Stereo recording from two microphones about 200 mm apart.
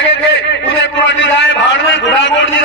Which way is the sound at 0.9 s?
65° left (ahead or behind).